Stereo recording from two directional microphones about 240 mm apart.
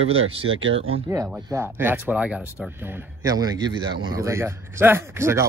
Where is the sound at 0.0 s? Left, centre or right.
Right.